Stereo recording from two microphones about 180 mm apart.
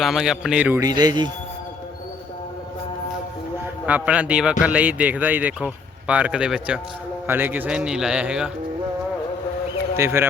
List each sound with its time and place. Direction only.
0.0 s a man's voice: centre (ahead or behind)
0.8 s speech: 20° right (ahead or behind)
3.8 s a man's voice: 5° right (ahead or behind)
10.0 s speech: 15° right (ahead or behind)